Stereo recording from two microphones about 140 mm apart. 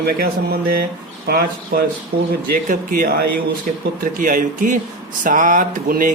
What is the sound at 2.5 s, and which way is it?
Speech, 80° right.